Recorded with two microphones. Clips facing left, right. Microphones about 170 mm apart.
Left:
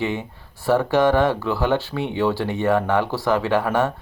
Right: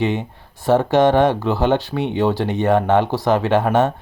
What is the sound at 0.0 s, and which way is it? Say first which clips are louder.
Speech: right 4 dB; 20° right (ahead or behind).